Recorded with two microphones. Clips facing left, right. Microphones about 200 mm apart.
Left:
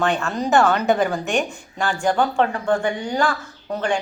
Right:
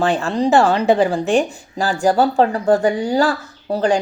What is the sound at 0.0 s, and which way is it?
Speech, 35° right (ahead or behind).